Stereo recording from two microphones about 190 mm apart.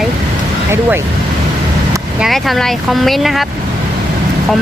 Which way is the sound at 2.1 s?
Centre (ahead or behind).